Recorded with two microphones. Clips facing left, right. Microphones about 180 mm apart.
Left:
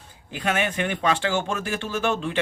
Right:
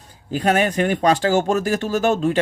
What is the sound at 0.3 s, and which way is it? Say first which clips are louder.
Speech: right 7 dB; 40° right (ahead or behind).